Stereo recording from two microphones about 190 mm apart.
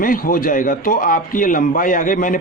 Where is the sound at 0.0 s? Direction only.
45° left (ahead or behind).